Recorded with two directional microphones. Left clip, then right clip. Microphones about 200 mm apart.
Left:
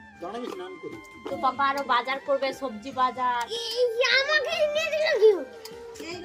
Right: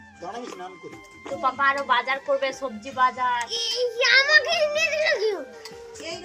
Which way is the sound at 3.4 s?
15° left (ahead or behind).